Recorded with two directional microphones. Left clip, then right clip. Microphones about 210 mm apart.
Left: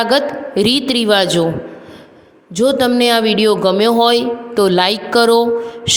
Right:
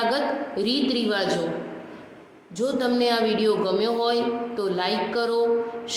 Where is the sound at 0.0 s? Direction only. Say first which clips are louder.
Left 9 dB; 45° left (ahead or behind).